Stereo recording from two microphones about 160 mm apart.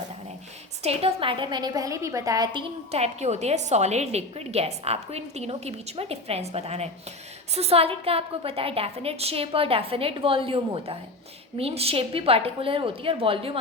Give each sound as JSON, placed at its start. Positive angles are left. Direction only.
{"t": 0.8, "sound": "a woman's voice", "side_deg": -40}